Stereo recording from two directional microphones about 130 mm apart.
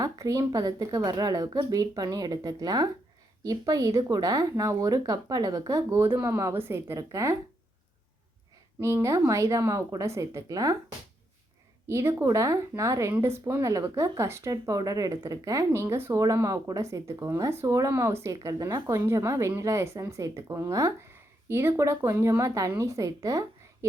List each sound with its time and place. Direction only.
0.0 s speech: 25° right (ahead or behind)
8.8 s speech: 20° right (ahead or behind)
11.9 s speech: 20° right (ahead or behind)